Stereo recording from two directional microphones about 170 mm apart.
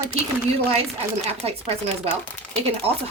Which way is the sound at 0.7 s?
35° right (ahead or behind).